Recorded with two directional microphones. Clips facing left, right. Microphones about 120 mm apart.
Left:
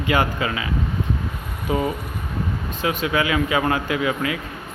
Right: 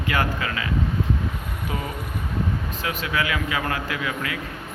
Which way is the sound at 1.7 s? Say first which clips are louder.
Left 9 dB; 25° left (ahead or behind).